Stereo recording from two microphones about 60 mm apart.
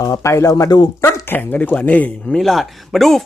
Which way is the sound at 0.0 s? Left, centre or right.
Left.